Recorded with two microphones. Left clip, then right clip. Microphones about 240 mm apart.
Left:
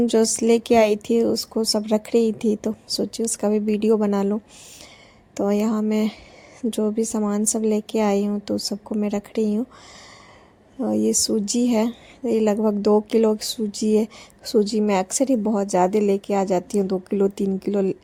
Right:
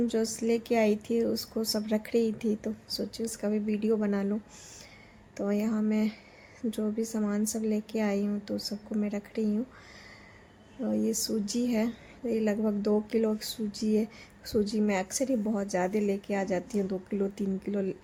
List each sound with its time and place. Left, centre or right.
0.0 s a woman's voice: left
10.8 s a woman's voice: left